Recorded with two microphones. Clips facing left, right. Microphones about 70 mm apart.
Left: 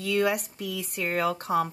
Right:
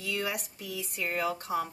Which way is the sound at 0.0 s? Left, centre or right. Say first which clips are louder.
Left 8 dB; left.